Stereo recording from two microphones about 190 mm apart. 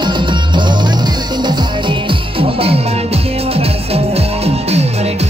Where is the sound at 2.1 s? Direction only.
30° right (ahead or behind).